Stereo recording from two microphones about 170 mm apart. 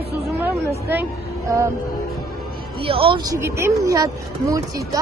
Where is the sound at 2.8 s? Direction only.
30° right (ahead or behind).